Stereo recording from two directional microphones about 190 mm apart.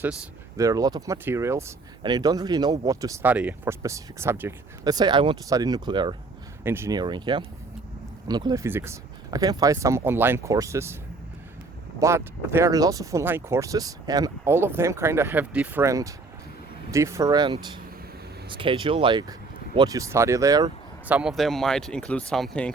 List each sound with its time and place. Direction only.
0.0 s speech: 10° right (ahead or behind)
6.7 s speech: 15° right (ahead or behind)
11.9 s speech: 15° right (ahead or behind)
21.1 s speech: 5° right (ahead or behind)